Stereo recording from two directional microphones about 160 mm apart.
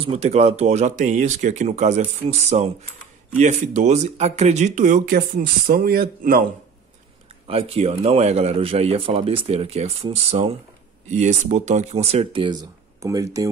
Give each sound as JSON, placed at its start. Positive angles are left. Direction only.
{"t": 0.0, "sound": "speech", "side_deg": -40}
{"t": 7.4, "sound": "a man's voice", "side_deg": -35}